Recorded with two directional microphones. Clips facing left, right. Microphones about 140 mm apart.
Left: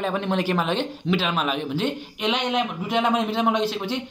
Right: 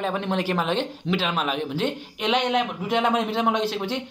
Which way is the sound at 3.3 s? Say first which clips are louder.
Left 1 dB; 55° right (ahead or behind).